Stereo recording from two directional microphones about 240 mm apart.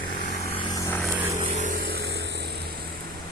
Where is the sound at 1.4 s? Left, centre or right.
Right.